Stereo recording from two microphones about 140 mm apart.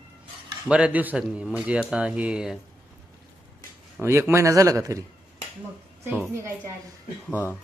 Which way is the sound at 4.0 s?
15° right (ahead or behind).